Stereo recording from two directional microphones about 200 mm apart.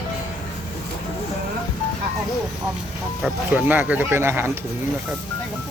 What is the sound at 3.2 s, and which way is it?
Speech, 10° right (ahead or behind).